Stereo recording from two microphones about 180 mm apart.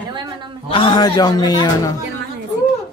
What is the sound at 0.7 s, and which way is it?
A man's voice, 25° left (ahead or behind).